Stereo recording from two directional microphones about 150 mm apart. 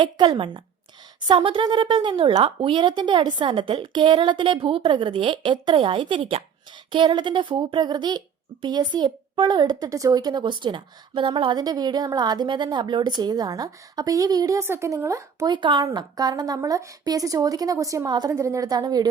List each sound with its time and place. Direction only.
0.0 s speech: 30° right (ahead or behind)